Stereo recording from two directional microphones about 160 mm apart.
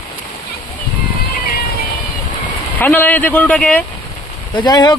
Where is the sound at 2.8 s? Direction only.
10° left (ahead or behind).